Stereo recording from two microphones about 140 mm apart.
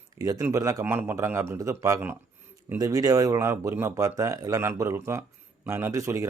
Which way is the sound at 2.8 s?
25° right (ahead or behind).